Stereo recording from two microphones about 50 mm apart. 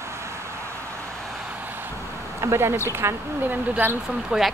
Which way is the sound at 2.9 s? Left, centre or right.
Right.